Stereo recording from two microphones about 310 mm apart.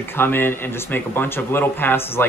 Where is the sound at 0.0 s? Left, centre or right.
Centre.